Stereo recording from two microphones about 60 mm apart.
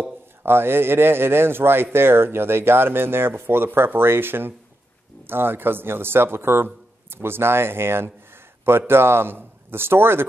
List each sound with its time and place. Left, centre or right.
0.4 s speech: right